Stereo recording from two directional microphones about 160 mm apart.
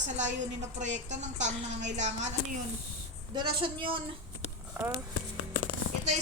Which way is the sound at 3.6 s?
30° right (ahead or behind).